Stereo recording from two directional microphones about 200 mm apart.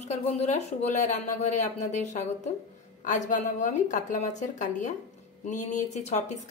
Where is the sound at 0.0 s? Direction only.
35° left (ahead or behind).